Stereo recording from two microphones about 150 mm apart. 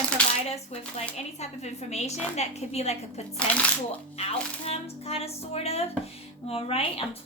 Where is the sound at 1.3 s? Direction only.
45° left (ahead or behind).